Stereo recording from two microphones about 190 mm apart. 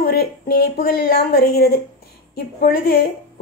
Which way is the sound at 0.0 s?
55° left (ahead or behind).